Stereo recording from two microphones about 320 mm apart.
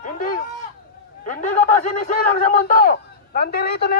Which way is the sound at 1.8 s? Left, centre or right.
Left.